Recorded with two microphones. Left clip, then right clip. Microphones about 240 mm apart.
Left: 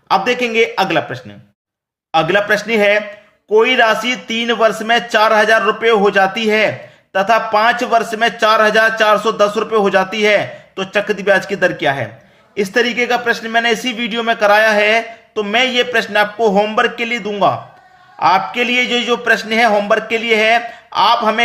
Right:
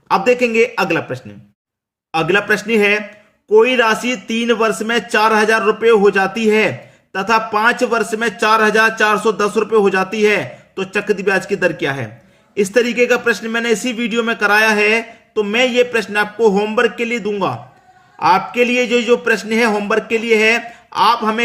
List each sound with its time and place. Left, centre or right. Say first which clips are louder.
0.1 s a man's voice: right 1 dB; right